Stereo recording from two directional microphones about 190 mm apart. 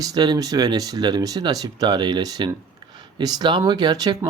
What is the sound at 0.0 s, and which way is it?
Speech, 20° right (ahead or behind).